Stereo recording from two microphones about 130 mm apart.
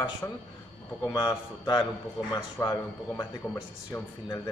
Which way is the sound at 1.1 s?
30° left (ahead or behind).